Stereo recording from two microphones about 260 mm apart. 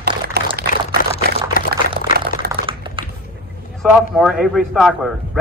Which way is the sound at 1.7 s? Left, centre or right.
Right.